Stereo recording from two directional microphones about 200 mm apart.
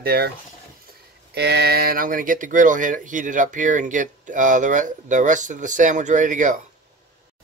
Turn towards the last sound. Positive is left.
turn(degrees=-40)  # may be behind; listen again after turning